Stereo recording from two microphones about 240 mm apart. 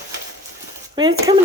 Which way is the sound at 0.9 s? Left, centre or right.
Centre.